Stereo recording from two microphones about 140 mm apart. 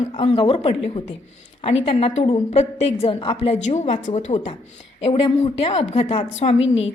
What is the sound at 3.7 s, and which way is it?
A woman's voice, 60° left (ahead or behind).